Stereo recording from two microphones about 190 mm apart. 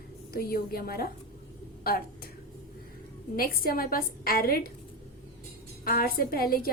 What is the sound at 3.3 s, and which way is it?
A woman's voice, 50° left (ahead or behind).